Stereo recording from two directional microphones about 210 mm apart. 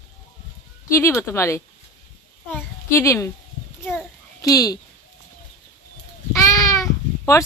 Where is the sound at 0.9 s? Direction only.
15° left (ahead or behind).